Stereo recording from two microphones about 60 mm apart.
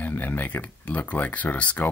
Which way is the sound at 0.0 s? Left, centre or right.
Left.